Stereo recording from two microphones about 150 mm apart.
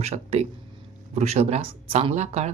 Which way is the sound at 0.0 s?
45° right (ahead or behind).